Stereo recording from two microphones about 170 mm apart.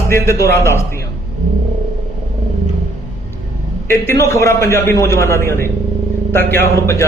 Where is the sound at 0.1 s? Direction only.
15° left (ahead or behind).